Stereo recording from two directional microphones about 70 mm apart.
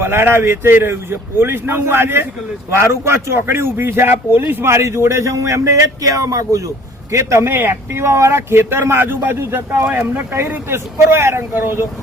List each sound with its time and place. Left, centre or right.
0.0 s speech: right